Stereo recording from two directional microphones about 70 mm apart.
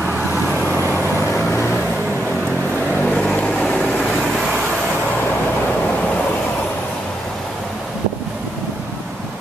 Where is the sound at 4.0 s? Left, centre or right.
Centre.